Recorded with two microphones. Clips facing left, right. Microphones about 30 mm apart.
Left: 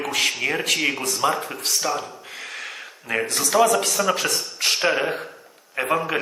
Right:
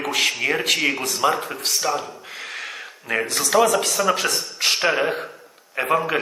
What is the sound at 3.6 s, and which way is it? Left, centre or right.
A man's voice, centre.